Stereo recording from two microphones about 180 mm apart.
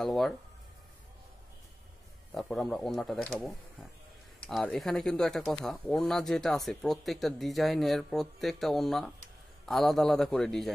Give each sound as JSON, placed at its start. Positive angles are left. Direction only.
{"t": 0.0, "sound": "speech", "side_deg": 0}
{"t": 2.3, "sound": "speech", "side_deg": 0}